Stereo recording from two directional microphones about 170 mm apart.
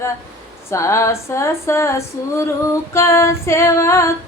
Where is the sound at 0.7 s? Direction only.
20° left (ahead or behind).